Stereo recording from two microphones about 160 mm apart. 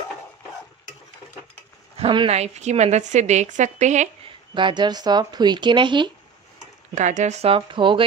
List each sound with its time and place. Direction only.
2.0 s speech: 35° right (ahead or behind)
4.6 s speech: 30° right (ahead or behind)
7.0 s speech: 50° right (ahead or behind); by 8.0 s 30° right (ahead or behind)